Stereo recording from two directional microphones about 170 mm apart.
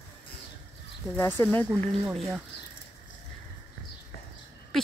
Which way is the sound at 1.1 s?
15° left (ahead or behind).